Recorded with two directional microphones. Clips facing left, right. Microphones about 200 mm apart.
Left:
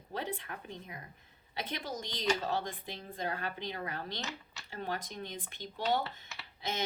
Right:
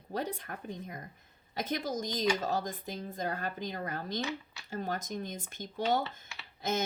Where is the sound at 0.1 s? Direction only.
40° right (ahead or behind).